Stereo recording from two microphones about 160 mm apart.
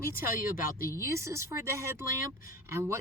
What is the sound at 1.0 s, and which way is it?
Speech, 20° right (ahead or behind).